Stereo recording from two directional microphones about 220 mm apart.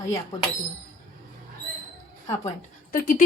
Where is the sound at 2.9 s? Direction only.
40° left (ahead or behind).